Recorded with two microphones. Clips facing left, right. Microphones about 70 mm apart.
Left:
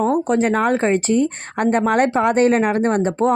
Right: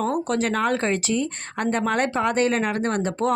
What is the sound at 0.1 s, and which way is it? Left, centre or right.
A woman's voice, left.